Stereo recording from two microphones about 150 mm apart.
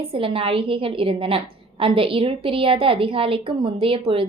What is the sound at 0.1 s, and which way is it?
A woman's voice, 35° right (ahead or behind).